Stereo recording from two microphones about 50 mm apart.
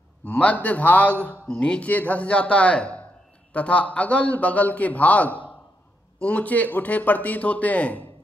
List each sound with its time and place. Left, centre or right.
0.2 s speech: left
1.5 s a man's voice: left
1.9 s a man's voice: left